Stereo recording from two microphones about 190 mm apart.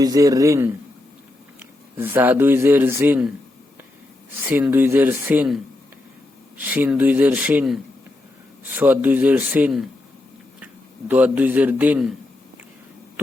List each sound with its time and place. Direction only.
0.0 s a man's voice: 20° right (ahead or behind)
2.0 s a man's voice: 10° right (ahead or behind)
4.4 s a man's voice: 10° right (ahead or behind)
6.7 s a man's voice: 10° right (ahead or behind)
11.1 s a man's voice: 10° right (ahead or behind)